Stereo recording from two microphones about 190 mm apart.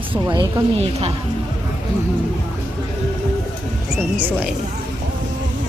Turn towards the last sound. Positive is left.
turn(degrees=-10)  # may be behind; listen again after turning